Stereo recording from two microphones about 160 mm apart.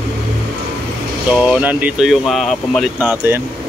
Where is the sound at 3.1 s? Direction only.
15° right (ahead or behind).